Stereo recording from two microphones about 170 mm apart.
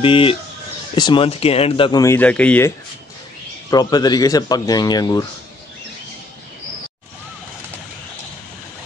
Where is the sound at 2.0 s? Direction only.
10° left (ahead or behind).